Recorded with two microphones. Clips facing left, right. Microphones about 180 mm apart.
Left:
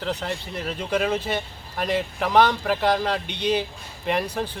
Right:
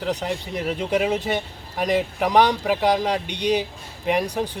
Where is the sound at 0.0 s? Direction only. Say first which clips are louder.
Right 3 dB; 15° right (ahead or behind).